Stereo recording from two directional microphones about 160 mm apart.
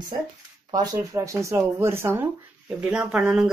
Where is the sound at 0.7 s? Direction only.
20° right (ahead or behind).